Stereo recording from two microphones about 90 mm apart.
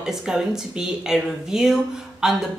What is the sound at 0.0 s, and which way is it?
A woman's voice, 5° right (ahead or behind).